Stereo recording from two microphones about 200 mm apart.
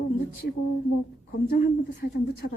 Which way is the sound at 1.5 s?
45° left (ahead or behind).